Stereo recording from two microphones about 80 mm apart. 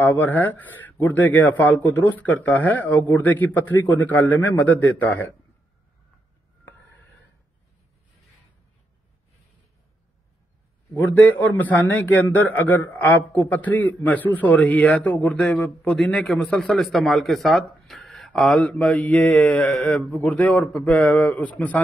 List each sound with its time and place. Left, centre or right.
0.0 s speech: left
10.9 s speech: centre
16.1 s a man's voice: centre
16.7 s speech: centre
18.5 s speech: centre